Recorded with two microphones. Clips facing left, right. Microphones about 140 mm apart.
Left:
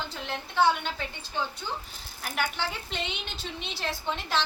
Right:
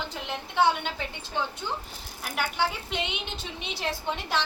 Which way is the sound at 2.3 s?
10° right (ahead or behind).